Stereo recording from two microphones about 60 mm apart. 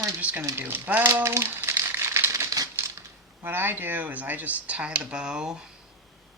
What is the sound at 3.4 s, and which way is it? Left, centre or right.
Speech, right.